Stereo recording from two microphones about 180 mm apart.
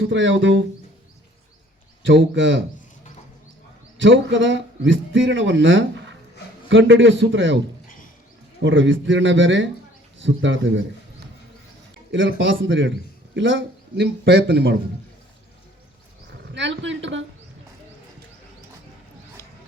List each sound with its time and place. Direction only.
0.0 s a man's voice: 90° right
2.0 s a man's voice: 90° right
3.9 s a man's voice: 90° right
8.6 s a man's voice: 90° right
12.1 s a man's voice: 90° right
16.6 s a man's voice: 85° right